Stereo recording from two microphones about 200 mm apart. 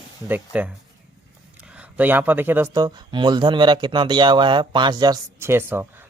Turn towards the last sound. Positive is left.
turn(degrees=-10)  # may be behind; listen again after turning